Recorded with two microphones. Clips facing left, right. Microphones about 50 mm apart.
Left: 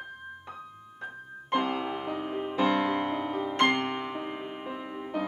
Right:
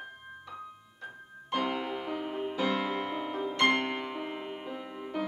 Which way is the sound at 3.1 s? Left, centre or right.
Centre.